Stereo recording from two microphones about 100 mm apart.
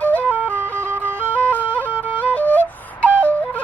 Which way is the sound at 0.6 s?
20° right (ahead or behind).